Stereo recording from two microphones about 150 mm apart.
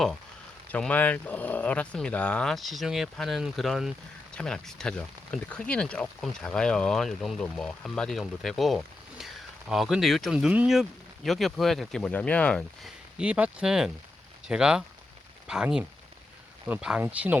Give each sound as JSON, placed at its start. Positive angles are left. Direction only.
{"t": 0.7, "sound": "speech", "side_deg": 10}
{"t": 13.1, "sound": "speech", "side_deg": -10}